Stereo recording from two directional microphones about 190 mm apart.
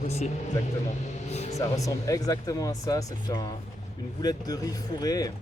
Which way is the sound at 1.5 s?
15° left (ahead or behind).